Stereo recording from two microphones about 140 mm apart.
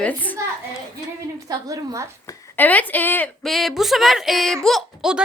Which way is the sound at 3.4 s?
Centre (ahead or behind).